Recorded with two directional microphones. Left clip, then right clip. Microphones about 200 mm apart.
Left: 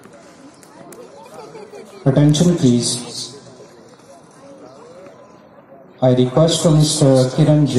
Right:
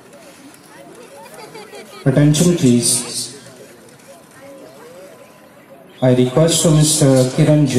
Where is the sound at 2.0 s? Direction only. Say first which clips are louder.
Right 1 dB; 25° right (ahead or behind).